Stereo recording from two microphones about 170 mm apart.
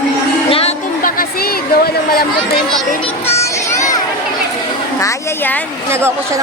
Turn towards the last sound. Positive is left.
turn(degrees=-15)  # may be behind; listen again after turning